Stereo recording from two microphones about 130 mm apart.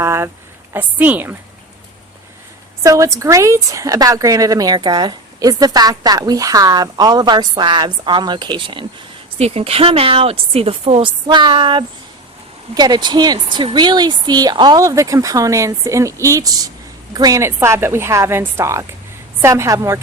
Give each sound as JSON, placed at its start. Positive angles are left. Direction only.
{"t": 0.0, "sound": "speech", "side_deg": -20}
{"t": 2.8, "sound": "a woman's voice", "side_deg": -25}